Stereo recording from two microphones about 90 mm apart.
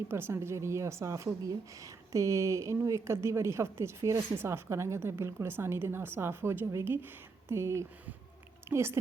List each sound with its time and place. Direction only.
0.1 s a woman's voice: 30° right (ahead or behind)